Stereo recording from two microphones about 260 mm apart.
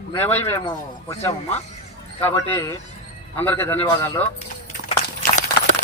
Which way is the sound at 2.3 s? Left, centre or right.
Centre.